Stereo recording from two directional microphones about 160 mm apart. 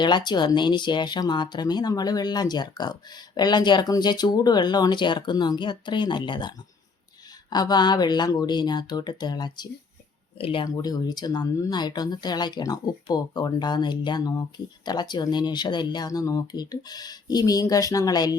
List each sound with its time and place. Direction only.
0.0 s speech: 30° left (ahead or behind)
7.5 s speech: 25° left (ahead or behind)